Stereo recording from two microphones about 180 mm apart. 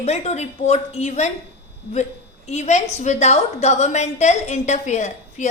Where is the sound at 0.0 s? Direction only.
35° left (ahead or behind).